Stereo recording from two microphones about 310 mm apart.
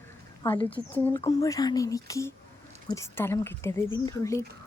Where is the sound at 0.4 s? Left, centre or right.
Centre.